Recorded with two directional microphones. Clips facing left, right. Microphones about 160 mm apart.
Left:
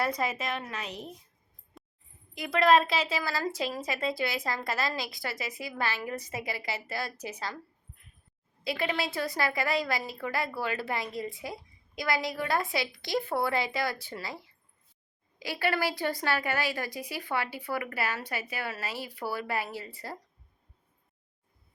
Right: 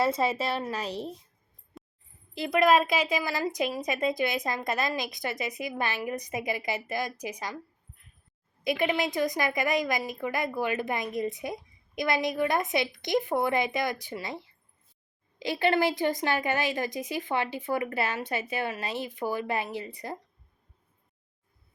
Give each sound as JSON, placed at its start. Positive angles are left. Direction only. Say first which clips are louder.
{"t": 0.0, "sound": "a woman's voice", "louder": "right 4 dB", "side_deg": -25}
{"t": 1.7, "sound": "a sound", "louder": "right 5 dB", "side_deg": 0}
{"t": 2.5, "sound": "a woman's voice", "louder": "right 1 dB", "side_deg": -10}
{"t": 8.6, "sound": "a woman's voice", "louder": "right 4 dB", "side_deg": -20}